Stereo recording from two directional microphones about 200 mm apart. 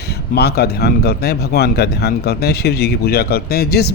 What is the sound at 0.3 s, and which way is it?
Speech, 55° left (ahead or behind).